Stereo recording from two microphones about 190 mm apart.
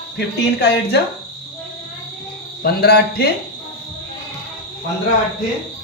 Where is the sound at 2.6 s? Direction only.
55° left (ahead or behind).